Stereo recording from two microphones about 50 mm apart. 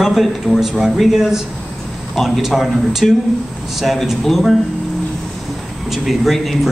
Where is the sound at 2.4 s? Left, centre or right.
Centre.